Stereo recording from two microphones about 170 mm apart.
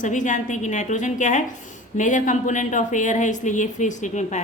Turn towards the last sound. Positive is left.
turn(degrees=45)  # may be behind; listen again after turning